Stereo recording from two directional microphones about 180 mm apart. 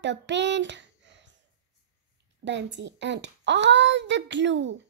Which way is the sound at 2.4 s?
80° right.